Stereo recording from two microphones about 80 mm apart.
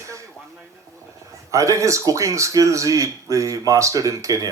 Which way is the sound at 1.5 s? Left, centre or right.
Right.